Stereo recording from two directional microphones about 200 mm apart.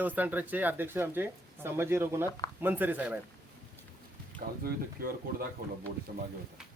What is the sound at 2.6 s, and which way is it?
Speech, 10° right (ahead or behind).